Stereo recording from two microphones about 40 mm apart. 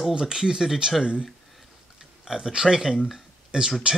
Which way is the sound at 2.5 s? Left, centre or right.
Centre.